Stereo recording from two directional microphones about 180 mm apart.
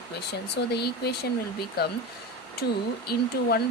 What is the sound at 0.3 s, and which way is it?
Speech, 65° left (ahead or behind).